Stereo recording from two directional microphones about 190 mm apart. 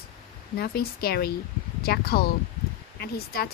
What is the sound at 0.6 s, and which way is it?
Speech, 55° left (ahead or behind).